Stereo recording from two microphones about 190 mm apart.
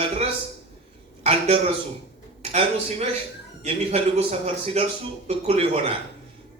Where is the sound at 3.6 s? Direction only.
35° right (ahead or behind).